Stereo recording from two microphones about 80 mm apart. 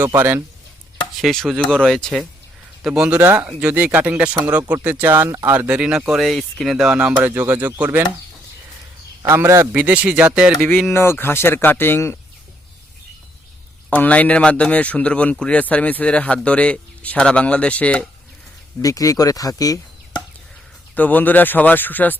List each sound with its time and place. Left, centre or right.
0.1 s a man's voice: right
1.2 s speech: centre
2.8 s speech: centre
6.1 s speech: centre
7.0 s speech: centre
9.2 s a man's voice: right
9.7 s speech: centre
10.9 s speech: left
13.9 s speech: centre
18.8 s speech: left
20.9 s speech: left